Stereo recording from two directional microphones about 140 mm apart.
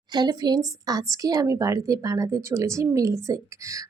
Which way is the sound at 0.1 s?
30° right (ahead or behind).